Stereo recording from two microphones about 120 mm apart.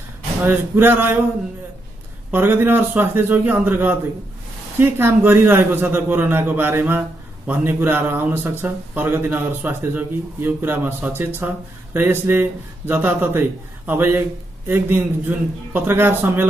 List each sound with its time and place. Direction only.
0.4 s a man's voice: 15° right (ahead or behind)
2.3 s a man's voice: 15° right (ahead or behind)